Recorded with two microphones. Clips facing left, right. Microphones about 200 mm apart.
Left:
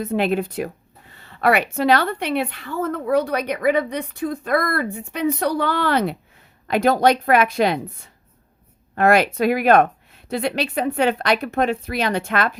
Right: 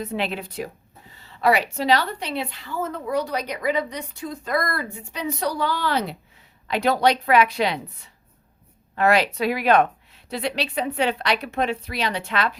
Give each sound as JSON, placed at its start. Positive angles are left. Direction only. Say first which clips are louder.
{"t": 0.0, "sound": "a woman's voice", "louder": "left 7 dB", "side_deg": 50}